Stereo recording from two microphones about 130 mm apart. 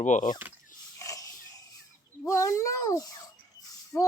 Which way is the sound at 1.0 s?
25° left (ahead or behind).